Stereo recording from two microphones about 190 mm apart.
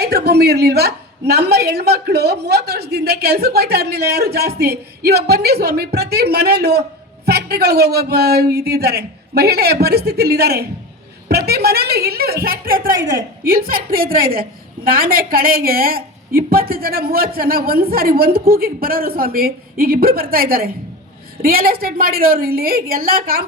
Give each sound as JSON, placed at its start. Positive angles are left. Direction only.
{"t": 0.0, "sound": "a woman's voice", "side_deg": -60}